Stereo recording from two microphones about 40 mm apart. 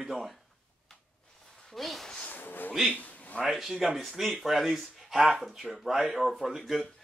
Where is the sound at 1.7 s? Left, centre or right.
Centre.